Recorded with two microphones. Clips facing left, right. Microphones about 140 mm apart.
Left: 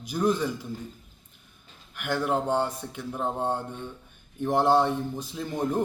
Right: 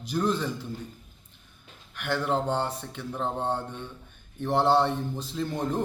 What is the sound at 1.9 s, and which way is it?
A man's voice, 10° left (ahead or behind).